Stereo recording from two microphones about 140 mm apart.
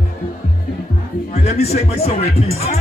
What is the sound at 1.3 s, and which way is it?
A man's voice, 50° left (ahead or behind).